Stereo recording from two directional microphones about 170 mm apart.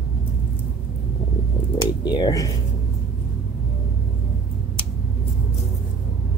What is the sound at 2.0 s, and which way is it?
Speech, 25° left (ahead or behind).